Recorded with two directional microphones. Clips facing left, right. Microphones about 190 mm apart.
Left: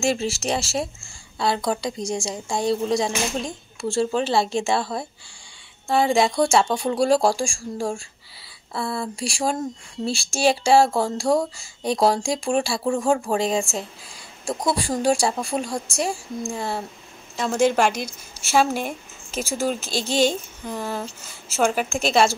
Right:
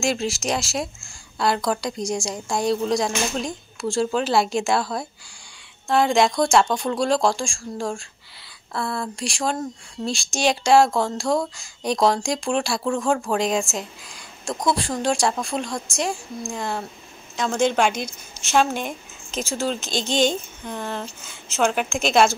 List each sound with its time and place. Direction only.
0.0 s a woman's voice: 5° left (ahead or behind)
0.3 s speech: 35° left (ahead or behind)
1.4 s a woman's voice: centre (ahead or behind)
14.1 s a sound: 10° left (ahead or behind)
14.8 s a woman's voice: 10° left (ahead or behind)